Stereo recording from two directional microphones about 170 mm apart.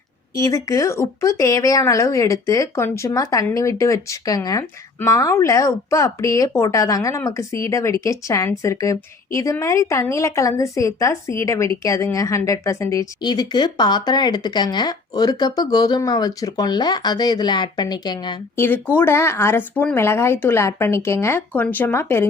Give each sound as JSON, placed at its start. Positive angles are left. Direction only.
{"t": 0.3, "sound": "a woman's voice", "side_deg": 20}
{"t": 18.5, "sound": "speech", "side_deg": 15}